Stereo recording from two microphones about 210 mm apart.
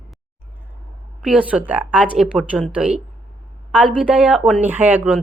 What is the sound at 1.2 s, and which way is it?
Speech, 5° right (ahead or behind).